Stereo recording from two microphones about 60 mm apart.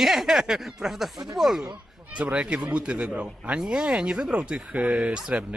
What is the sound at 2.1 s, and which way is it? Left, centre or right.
A man's voice, right.